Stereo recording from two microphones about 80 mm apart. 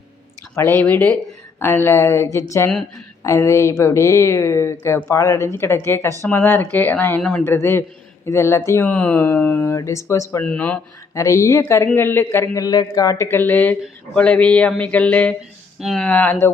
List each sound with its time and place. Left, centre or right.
0.5 s speech: left
7.2 s speech: centre
7.4 s speech: left
8.9 s speech: centre
9.7 s speech: left
10.4 s speech: centre
11.1 s speech: left
12.5 s a man's voice: left
13.3 s speech: left